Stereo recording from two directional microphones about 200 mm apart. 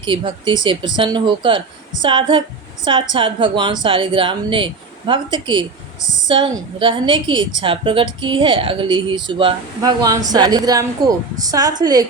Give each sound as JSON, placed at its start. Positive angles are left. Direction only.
{"t": 0.0, "sound": "a woman's voice", "side_deg": -25}